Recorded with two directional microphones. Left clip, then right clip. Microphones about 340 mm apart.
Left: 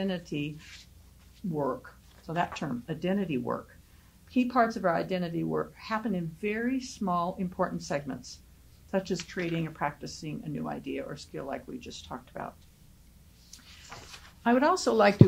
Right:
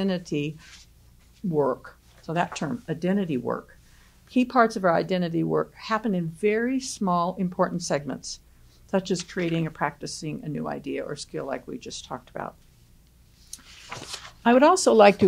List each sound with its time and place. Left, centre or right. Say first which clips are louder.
0.0 s speech: right 6 dB; right
1.5 s speech: right 7 dB; right
13.5 s a sound: right 7 dB; right
14.4 s speech: right 7 dB; right